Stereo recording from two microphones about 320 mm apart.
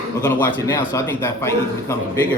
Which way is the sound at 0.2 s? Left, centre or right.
Centre.